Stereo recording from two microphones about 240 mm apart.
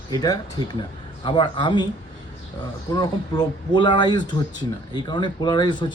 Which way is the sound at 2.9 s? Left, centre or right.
Centre.